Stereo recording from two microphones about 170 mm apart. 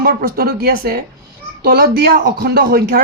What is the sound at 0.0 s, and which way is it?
Speech, 60° right (ahead or behind).